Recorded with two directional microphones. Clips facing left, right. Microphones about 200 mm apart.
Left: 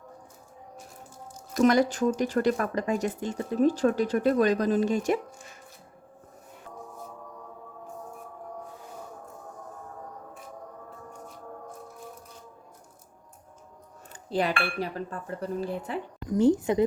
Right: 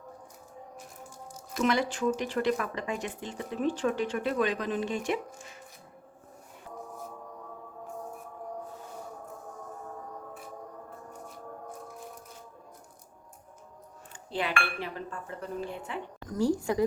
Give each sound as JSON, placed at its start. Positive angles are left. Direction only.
{"t": 1.5, "sound": "speech", "side_deg": 40}
{"t": 14.1, "sound": "speech", "side_deg": 40}
{"t": 16.3, "sound": "speech", "side_deg": 20}